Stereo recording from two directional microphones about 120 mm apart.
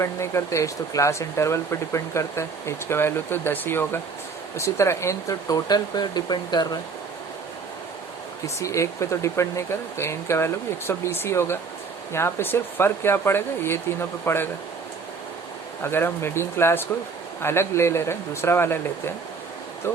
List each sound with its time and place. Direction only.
0.0 s speech: 25° left (ahead or behind)
8.5 s speech: 25° left (ahead or behind)
15.8 s speech: 20° left (ahead or behind)